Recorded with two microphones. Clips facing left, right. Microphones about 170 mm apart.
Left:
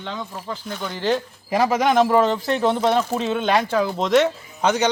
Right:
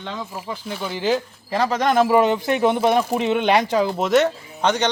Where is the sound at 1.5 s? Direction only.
10° left (ahead or behind); by 4.1 s 10° right (ahead or behind).